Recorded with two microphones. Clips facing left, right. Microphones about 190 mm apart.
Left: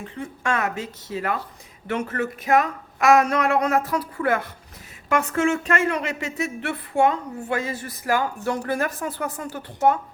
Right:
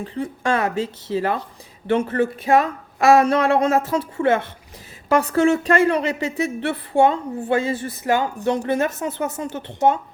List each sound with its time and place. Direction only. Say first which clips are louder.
0.0 s speech: right 5 dB; 30° right (ahead or behind)